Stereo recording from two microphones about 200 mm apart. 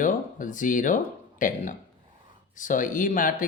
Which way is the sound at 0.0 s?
40° left (ahead or behind).